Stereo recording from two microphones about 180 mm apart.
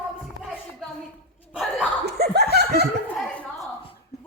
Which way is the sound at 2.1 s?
65° right (ahead or behind).